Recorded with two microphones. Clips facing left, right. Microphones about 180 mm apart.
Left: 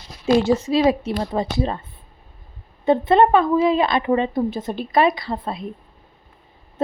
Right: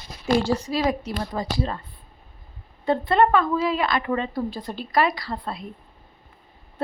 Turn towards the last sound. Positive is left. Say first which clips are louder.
# left 4 dB
turn(degrees=20)  # may be behind; listen again after turning